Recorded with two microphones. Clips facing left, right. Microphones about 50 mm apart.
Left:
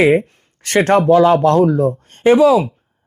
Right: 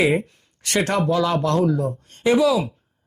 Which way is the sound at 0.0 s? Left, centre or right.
Left.